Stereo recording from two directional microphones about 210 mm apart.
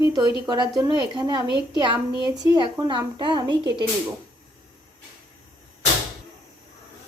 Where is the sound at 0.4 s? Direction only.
20° right (ahead or behind).